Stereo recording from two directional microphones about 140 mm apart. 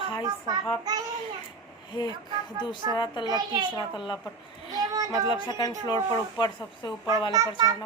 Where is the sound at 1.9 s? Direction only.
30° left (ahead or behind).